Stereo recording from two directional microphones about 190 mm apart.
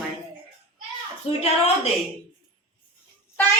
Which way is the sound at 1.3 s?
35° left (ahead or behind).